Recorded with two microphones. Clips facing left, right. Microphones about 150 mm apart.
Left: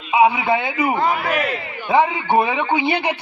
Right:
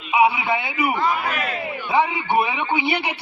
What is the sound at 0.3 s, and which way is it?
Speech, 40° left (ahead or behind).